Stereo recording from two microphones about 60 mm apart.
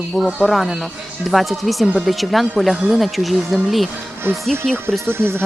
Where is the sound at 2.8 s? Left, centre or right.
Centre.